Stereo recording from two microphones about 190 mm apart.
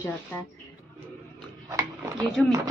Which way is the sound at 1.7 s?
15° right (ahead or behind).